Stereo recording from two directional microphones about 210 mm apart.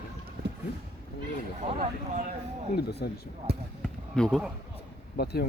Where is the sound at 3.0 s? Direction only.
50° left (ahead or behind).